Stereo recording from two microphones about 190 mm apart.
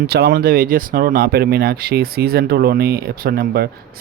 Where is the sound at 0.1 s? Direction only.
55° right (ahead or behind).